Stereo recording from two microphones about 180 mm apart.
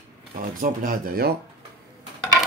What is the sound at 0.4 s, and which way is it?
Speech, 50° right (ahead or behind).